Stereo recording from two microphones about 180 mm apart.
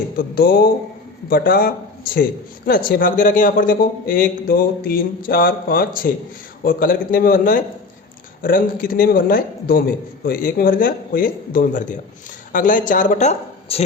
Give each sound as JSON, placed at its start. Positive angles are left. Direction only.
{"t": 0.2, "sound": "a man's voice", "side_deg": 55}